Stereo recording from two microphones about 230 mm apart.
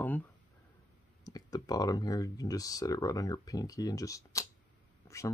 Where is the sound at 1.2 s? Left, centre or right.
Centre.